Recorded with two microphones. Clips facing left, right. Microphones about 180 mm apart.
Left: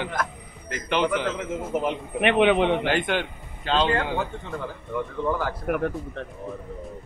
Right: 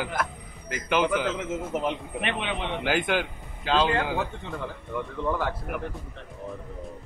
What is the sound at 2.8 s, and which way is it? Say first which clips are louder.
A man's voice: left 1 dB; 5° right (ahead or behind).